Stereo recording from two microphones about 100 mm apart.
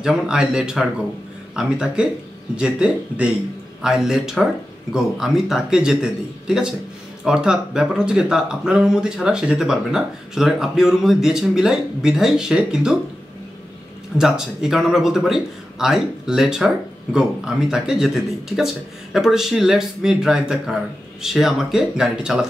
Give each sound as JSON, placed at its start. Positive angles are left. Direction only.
{"t": 0.0, "sound": "a man's voice", "side_deg": -5}
{"t": 14.1, "sound": "a man's voice", "side_deg": -5}